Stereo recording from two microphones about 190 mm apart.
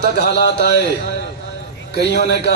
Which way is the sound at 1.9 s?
60° left (ahead or behind).